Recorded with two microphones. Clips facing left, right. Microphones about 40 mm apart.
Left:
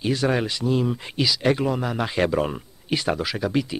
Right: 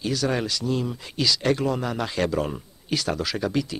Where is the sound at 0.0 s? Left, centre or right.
Left.